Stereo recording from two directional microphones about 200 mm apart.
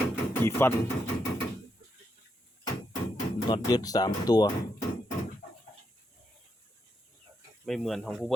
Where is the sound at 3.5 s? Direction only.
20° left (ahead or behind).